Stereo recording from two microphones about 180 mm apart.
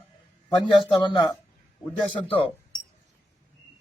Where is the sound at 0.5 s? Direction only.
25° left (ahead or behind).